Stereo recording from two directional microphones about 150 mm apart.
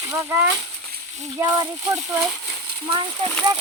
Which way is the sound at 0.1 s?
15° right (ahead or behind).